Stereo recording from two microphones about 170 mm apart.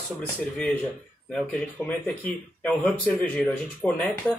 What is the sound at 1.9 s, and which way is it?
Speech, 5° left (ahead or behind).